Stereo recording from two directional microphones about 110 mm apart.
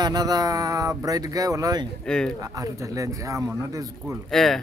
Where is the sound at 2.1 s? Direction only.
5° left (ahead or behind).